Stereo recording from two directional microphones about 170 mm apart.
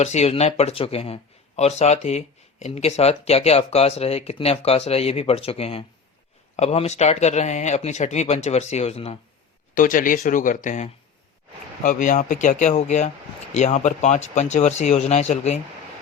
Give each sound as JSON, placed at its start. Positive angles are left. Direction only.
{"t": 0.0, "sound": "speech", "side_deg": 40}
{"t": 9.7, "sound": "speech", "side_deg": 55}